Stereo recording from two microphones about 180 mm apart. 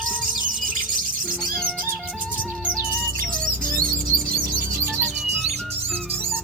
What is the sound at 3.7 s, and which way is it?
Music, 50° right (ahead or behind).